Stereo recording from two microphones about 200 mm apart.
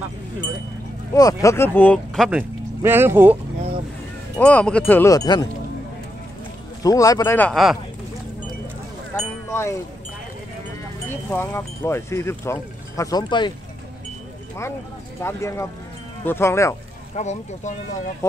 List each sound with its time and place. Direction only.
1.1 s speech: 15° left (ahead or behind); by 2.4 s centre (ahead or behind)
2.8 s speech: 10° right (ahead or behind)
4.4 s speech: 5° left (ahead or behind)
6.8 s speech: 15° left (ahead or behind)
9.1 s speech: 15° left (ahead or behind)
11.1 s speech: 10° left (ahead or behind)
15.2 s speech: 15° left (ahead or behind)
17.1 s speech: 35° left (ahead or behind)